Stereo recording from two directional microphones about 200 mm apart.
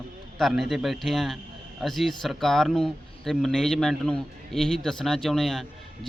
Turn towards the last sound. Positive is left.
turn(degrees=0)  # may be behind; listen again after turning